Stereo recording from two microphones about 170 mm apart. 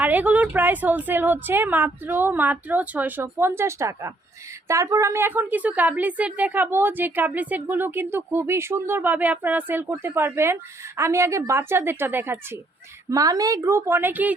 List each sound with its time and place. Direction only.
0.0 s a woman's voice: 10° right (ahead or behind)